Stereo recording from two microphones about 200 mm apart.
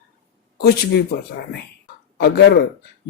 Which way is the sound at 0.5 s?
50° left (ahead or behind).